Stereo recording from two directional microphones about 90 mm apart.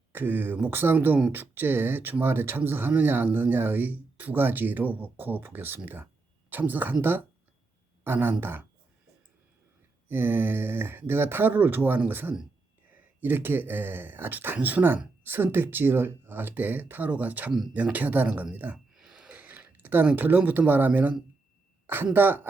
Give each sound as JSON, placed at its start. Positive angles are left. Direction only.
{"t": 0.1, "sound": "speech", "side_deg": -20}
{"t": 8.0, "sound": "speech", "side_deg": -25}
{"t": 10.1, "sound": "speech", "side_deg": -25}
{"t": 18.9, "sound": "a sound", "side_deg": -5}
{"t": 21.8, "sound": "speech", "side_deg": -25}